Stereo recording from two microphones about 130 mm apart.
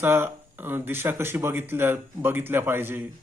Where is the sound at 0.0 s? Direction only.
15° right (ahead or behind).